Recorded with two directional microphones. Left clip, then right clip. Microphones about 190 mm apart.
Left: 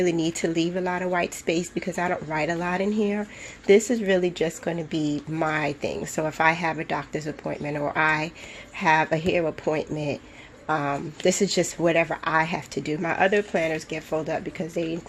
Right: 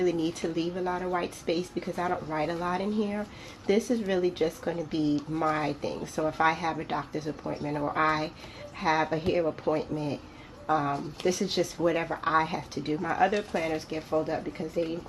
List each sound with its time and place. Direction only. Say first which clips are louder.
0.0 s speech: left 4 dB; 50° left (ahead or behind)